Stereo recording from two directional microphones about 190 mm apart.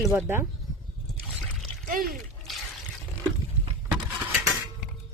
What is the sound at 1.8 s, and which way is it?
Pour, 45° right (ahead or behind).